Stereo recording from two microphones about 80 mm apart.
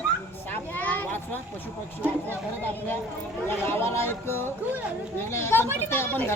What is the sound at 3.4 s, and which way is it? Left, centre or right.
Speech, left.